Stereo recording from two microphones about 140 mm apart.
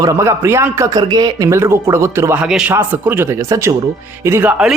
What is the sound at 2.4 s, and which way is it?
A man's voice, 5° right (ahead or behind).